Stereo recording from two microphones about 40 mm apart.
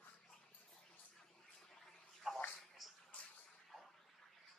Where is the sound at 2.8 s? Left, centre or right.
Centre.